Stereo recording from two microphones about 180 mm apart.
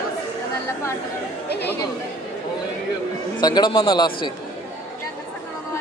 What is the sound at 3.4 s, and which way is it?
Speech, 25° left (ahead or behind).